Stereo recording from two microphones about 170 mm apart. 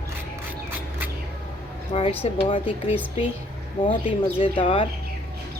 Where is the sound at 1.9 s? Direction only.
35° left (ahead or behind).